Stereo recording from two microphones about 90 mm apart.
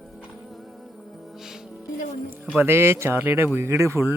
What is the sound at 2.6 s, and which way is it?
Speech, 30° right (ahead or behind).